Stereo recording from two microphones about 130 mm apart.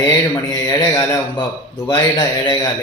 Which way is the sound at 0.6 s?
25° left (ahead or behind).